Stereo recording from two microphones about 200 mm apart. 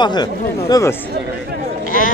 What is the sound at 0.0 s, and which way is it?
Speech, 20° left (ahead or behind).